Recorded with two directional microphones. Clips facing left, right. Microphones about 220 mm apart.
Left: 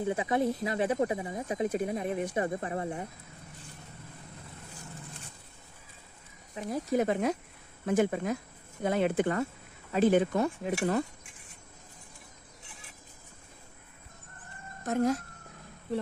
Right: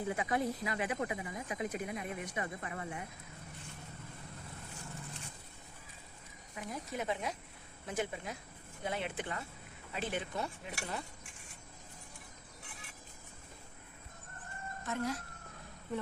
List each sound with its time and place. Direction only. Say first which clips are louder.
0.0 s speech: left 6 dB; 25° left (ahead or behind)
6.5 s speech: left 12 dB; 30° left (ahead or behind); by 11.0 s 50° left (ahead or behind)
14.8 s speech: left 10 dB; 45° left (ahead or behind)